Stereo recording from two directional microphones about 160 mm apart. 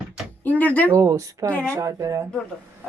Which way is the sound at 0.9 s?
20° right (ahead or behind).